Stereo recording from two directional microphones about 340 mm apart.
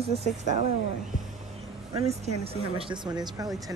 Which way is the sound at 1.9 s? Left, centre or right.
Centre.